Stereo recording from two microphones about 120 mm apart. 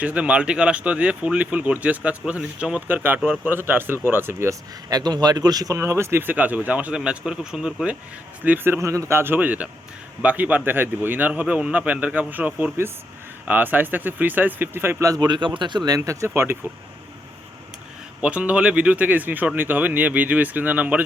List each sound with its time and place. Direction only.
0.0 s speech: 10° right (ahead or behind)
8.4 s speech: 15° right (ahead or behind)
15.1 s speech: 35° right (ahead or behind)
18.2 s speech: 10° right (ahead or behind)